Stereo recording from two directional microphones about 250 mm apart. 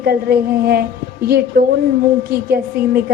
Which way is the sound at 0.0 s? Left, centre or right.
Right.